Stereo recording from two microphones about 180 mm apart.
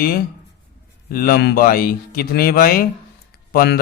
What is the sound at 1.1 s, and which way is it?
A man's voice, 55° left (ahead or behind).